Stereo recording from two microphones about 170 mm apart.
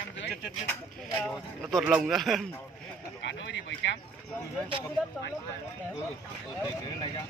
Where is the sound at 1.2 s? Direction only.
Centre (ahead or behind).